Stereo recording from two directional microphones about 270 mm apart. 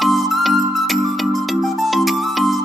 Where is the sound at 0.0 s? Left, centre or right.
Centre.